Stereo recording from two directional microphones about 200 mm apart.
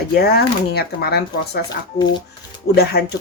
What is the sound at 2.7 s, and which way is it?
Speech, 55° left (ahead or behind).